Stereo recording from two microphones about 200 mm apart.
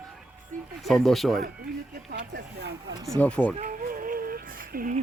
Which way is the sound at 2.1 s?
55° right (ahead or behind).